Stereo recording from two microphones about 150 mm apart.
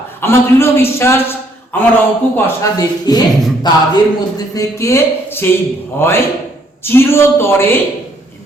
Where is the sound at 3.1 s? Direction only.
30° left (ahead or behind).